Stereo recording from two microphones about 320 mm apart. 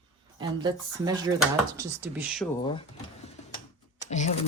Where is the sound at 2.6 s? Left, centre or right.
Centre.